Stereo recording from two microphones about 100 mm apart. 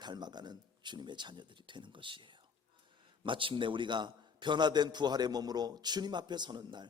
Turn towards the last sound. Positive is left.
turn(degrees=-50)  # may be behind; listen again after turning